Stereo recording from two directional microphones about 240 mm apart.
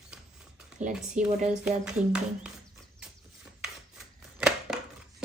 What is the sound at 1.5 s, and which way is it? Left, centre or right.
Speech, centre.